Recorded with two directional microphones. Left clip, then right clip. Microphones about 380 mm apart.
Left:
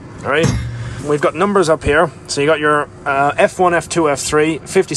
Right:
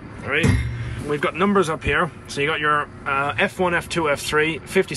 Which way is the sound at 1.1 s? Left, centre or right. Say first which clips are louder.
Left 6 dB; centre.